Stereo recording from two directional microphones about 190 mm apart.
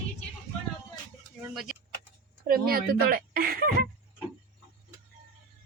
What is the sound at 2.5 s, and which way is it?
Speech, 50° right (ahead or behind).